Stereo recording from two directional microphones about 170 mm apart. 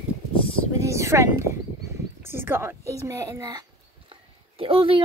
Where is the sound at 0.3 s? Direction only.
30° left (ahead or behind).